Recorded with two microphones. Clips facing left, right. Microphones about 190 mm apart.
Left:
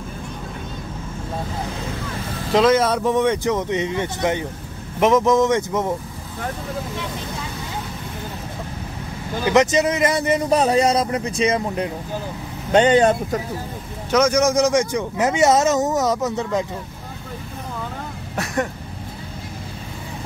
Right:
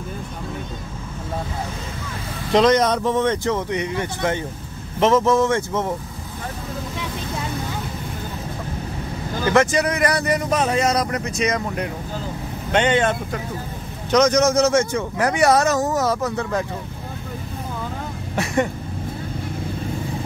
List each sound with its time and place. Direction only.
2.5 s speech: 5° left (ahead or behind)
9.4 s speech: 20° left (ahead or behind); by 13.4 s 35° left (ahead or behind)
14.1 s speech: 10° left (ahead or behind)
18.3 s throat clearing: centre (ahead or behind)